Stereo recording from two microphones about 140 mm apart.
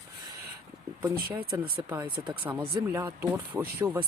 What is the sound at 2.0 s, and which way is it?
Speech, 35° right (ahead or behind).